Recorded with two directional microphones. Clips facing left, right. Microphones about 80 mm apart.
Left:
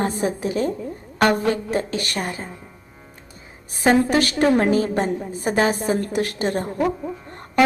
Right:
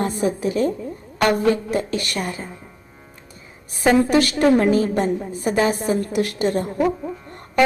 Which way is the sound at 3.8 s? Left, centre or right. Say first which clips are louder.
Right 1 dB; left.